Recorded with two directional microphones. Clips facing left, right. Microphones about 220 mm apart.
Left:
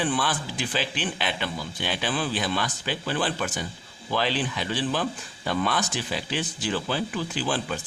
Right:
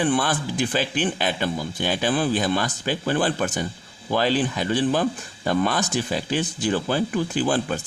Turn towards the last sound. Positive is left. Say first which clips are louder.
# right 6 dB
turn(degrees=-45)  # may be behind; listen again after turning